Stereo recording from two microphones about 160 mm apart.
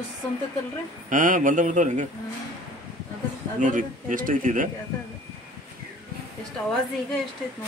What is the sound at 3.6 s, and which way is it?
Speech, 55° right (ahead or behind).